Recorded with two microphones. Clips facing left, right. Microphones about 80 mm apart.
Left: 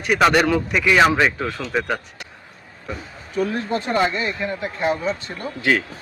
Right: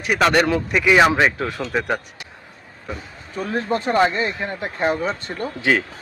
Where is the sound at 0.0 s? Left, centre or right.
Centre.